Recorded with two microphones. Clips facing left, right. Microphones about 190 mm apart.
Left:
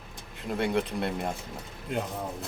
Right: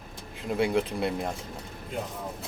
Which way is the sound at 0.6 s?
Centre (ahead or behind).